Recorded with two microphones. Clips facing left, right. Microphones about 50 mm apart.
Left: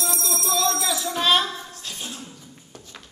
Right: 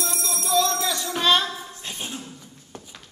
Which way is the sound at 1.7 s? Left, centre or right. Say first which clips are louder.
Right 1 dB; right.